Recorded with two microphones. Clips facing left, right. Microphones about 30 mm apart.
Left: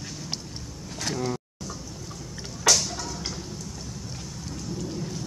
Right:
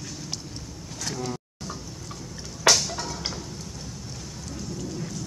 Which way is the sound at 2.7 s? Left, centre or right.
Right.